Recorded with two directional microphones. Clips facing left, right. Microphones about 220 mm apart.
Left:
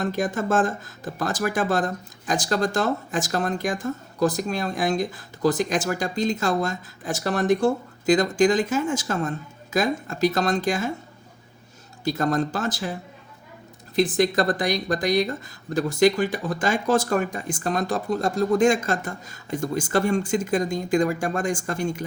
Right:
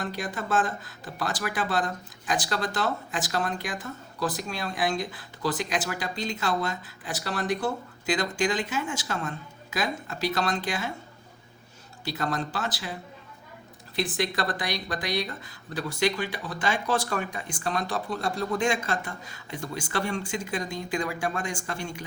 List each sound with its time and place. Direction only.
0.0 s speech: 45° left (ahead or behind)
12.0 s speech: 45° left (ahead or behind)
13.9 s speech: 45° left (ahead or behind)